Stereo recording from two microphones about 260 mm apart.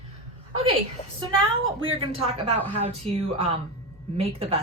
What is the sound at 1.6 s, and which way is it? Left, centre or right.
A woman's voice, right.